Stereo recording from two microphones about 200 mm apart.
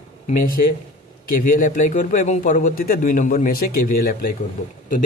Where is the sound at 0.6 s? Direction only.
35° left (ahead or behind).